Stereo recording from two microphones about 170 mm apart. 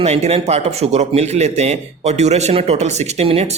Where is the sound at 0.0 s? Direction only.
40° right (ahead or behind).